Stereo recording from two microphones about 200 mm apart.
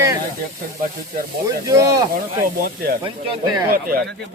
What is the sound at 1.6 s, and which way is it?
Speech, 15° right (ahead or behind).